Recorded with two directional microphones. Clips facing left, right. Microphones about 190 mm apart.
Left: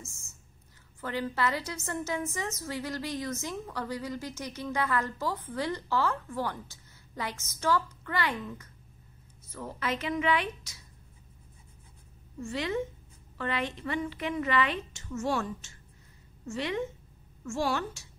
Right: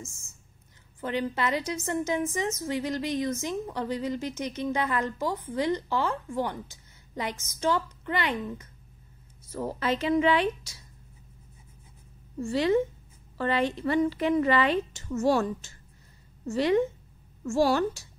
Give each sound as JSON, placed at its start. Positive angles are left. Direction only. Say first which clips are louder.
{"t": 1.0, "sound": "a woman's voice", "louder": "right 2 dB", "side_deg": -20}
{"t": 9.5, "sound": "a woman's voice", "louder": "right 5 dB", "side_deg": -35}
{"t": 12.4, "sound": "a woman's voice", "louder": "right 8 dB", "side_deg": -35}